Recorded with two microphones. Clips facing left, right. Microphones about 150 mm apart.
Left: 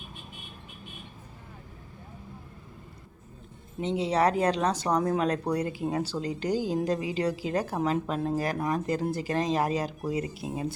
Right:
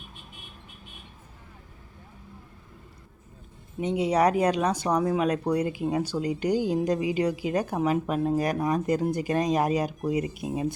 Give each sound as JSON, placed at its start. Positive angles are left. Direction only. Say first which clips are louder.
{"t": 3.8, "sound": "speech", "louder": "right 2 dB", "side_deg": -10}